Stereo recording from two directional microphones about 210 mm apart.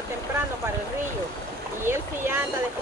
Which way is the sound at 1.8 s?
10° right (ahead or behind).